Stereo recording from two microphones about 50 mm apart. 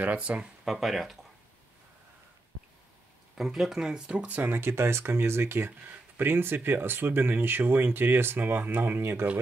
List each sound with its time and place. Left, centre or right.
0.0 s speech: right
0.7 s speech: centre
3.3 s speech: centre
4.1 s speech: right
4.6 s speech: right